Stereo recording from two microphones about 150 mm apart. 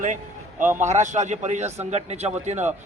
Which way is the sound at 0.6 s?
15° right (ahead or behind).